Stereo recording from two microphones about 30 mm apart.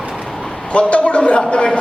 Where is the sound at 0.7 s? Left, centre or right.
Left.